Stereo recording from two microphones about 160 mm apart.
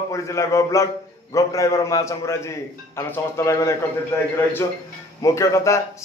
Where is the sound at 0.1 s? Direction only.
20° left (ahead or behind).